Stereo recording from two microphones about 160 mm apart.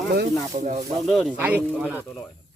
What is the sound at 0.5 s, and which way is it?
Speech, 45° right (ahead or behind).